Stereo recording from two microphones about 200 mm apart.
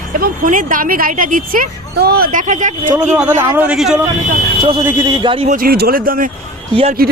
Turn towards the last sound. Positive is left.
turn(degrees=-50)  # may be behind; listen again after turning